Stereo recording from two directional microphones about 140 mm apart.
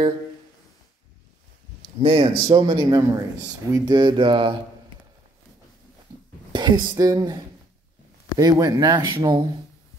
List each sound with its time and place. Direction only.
2.0 s speech: 40° right (ahead or behind)
6.5 s speech: 30° right (ahead or behind)